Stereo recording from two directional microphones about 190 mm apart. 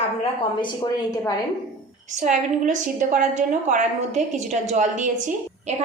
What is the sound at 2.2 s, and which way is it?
A woman's voice, 40° right (ahead or behind).